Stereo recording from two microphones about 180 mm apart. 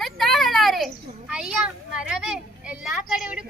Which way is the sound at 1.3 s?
5° right (ahead or behind).